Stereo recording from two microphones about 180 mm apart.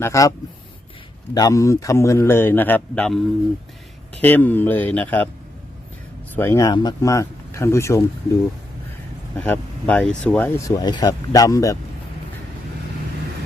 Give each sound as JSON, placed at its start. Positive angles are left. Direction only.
{"t": 0.0, "sound": "a man's voice", "side_deg": 15}
{"t": 4.2, "sound": "a man's voice", "side_deg": 10}
{"t": 6.3, "sound": "a man's voice", "side_deg": 10}
{"t": 9.4, "sound": "a man's voice", "side_deg": 10}
{"t": 10.8, "sound": "speech", "side_deg": 20}